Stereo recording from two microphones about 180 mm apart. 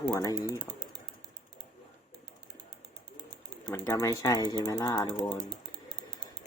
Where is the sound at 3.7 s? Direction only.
15° left (ahead or behind).